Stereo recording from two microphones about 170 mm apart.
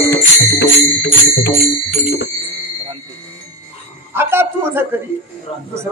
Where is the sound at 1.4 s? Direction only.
75° left (ahead or behind).